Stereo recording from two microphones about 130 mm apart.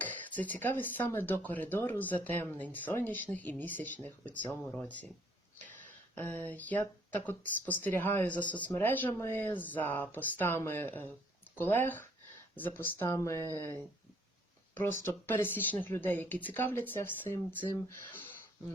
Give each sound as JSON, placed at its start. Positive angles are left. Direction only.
{"t": 0.0, "sound": "speech", "side_deg": 15}
{"t": 6.1, "sound": "speech", "side_deg": 15}
{"t": 15.0, "sound": "speech", "side_deg": 15}